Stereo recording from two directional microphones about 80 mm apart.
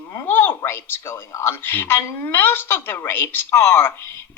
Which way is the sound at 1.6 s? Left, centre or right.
Left.